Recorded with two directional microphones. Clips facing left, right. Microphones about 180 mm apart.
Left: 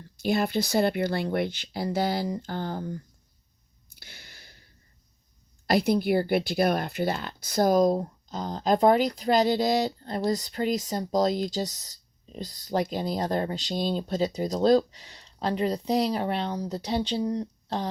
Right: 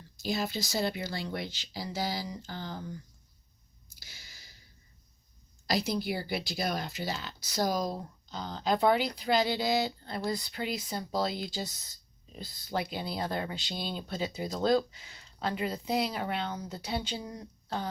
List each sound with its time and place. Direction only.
0.2 s speech: 60° left (ahead or behind)
3.8 s a sound: 60° left (ahead or behind)
5.6 s speech: 55° left (ahead or behind); by 17.8 s 35° left (ahead or behind)